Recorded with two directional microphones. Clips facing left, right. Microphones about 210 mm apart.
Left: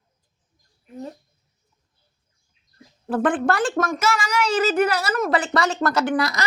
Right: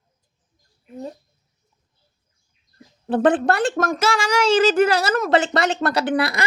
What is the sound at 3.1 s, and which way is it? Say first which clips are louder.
Speech: right 4 dB; 20° right (ahead or behind).